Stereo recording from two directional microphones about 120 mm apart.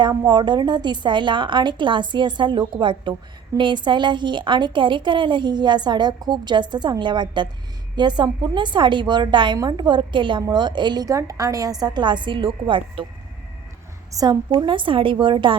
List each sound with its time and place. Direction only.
0.3 s a woman's voice: 40° right (ahead or behind)
14.1 s a woman's voice: 30° right (ahead or behind)
14.5 s a woman's voice: 45° right (ahead or behind)